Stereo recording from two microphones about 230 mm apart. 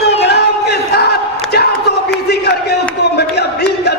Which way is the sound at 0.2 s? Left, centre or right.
Left.